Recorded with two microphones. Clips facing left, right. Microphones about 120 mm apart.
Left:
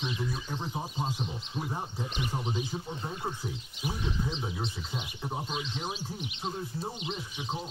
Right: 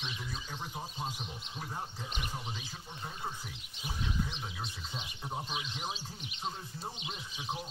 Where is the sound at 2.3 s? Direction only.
25° left (ahead or behind).